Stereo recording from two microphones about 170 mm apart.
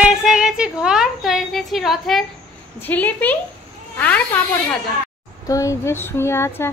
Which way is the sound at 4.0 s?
10° left (ahead or behind).